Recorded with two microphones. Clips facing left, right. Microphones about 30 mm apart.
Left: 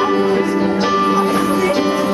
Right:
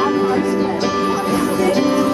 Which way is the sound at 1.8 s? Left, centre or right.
Centre.